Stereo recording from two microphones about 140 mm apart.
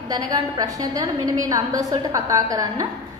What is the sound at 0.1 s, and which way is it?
A woman's voice, 25° right (ahead or behind).